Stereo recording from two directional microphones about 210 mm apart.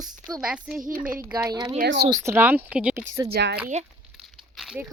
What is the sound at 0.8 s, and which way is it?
Speech, 40° right (ahead or behind).